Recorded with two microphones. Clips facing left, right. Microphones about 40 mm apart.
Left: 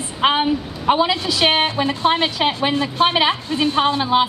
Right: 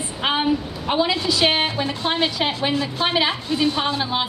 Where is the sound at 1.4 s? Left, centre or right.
Left.